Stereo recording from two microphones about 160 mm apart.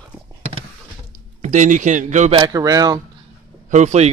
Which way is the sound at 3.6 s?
50° right (ahead or behind).